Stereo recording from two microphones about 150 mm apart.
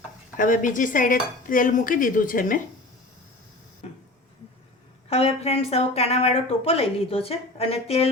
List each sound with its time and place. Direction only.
0.3 s dishes: 60° left (ahead or behind)
3.8 s a sound: 45° left (ahead or behind)
5.0 s a woman's voice: 40° left (ahead or behind)